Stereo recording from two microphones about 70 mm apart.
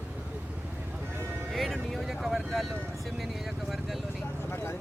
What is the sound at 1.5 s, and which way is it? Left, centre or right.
Vehicle, centre.